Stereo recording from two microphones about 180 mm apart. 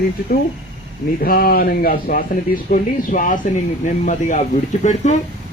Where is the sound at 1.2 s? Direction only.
55° left (ahead or behind).